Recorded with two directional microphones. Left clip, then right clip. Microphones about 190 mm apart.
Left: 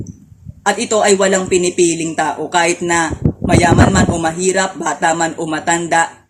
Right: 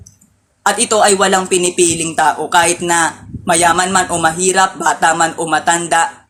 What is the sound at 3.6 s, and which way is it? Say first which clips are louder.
Speech: right 1 dB; 50° right (ahead or behind).